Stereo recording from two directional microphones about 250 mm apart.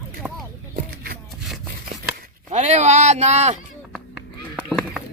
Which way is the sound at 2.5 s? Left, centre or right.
Right.